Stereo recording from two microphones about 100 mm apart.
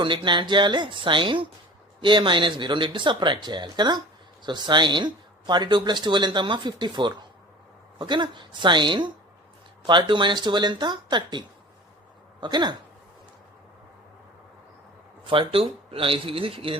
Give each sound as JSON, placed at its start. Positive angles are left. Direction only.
{"t": 0.0, "sound": "speech", "side_deg": -55}
{"t": 15.3, "sound": "speech", "side_deg": -60}